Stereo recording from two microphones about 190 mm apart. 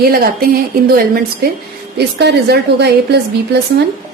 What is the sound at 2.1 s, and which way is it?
A woman's voice, 60° right (ahead or behind).